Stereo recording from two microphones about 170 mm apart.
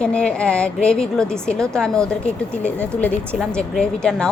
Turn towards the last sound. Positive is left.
turn(degrees=5)  # may be behind; listen again after turning